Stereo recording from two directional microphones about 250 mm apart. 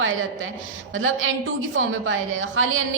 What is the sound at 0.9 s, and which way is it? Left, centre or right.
A woman's voice, right.